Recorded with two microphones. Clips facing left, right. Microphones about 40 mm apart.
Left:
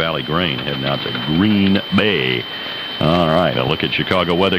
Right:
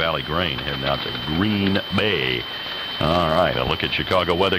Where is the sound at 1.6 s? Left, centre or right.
Left.